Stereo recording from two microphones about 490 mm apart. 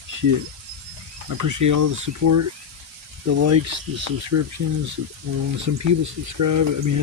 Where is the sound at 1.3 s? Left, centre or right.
Right.